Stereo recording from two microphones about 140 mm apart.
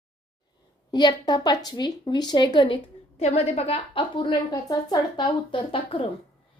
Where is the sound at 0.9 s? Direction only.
30° left (ahead or behind).